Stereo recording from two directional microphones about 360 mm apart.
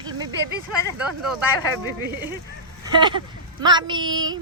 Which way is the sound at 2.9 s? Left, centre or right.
Centre.